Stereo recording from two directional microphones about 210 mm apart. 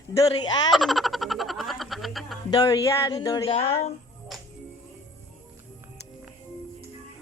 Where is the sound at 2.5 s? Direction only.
15° left (ahead or behind).